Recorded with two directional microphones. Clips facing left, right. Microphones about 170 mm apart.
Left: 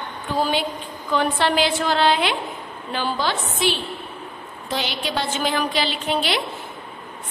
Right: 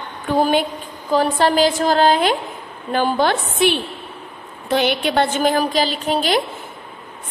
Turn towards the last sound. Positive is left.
turn(degrees=-40)  # may be behind; listen again after turning